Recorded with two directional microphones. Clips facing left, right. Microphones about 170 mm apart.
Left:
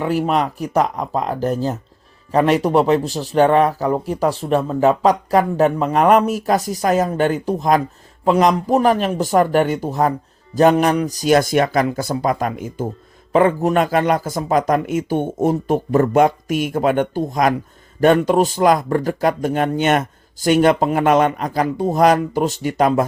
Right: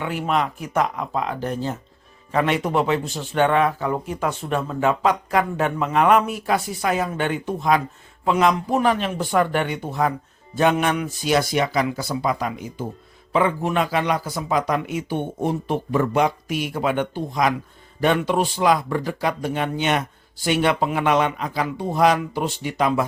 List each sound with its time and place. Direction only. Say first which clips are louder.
0.0 s speech: left 5 dB; 40° left (ahead or behind)